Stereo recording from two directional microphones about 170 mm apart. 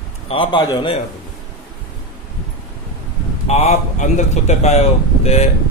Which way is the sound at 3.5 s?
40° left (ahead or behind).